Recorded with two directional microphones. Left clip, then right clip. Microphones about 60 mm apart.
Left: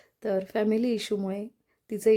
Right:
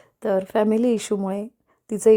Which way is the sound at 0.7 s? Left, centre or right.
Right.